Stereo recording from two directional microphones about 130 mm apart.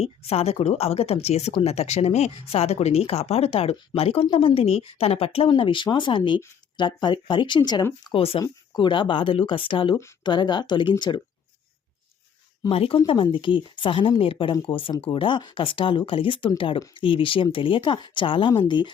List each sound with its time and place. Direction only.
0.0 s speech: 50° left (ahead or behind); by 7.9 s 35° left (ahead or behind)
8.0 s speech: 45° left (ahead or behind)
8.4 s speech: 35° left (ahead or behind)
12.6 s speech: 45° left (ahead or behind)